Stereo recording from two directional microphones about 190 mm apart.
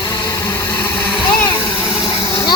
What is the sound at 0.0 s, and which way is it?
Vehicle, 15° left (ahead or behind).